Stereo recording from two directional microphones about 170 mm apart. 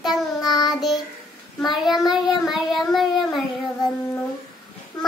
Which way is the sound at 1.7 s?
Centre (ahead or behind).